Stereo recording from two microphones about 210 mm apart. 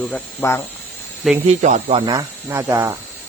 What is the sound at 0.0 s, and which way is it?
Speech, 10° left (ahead or behind).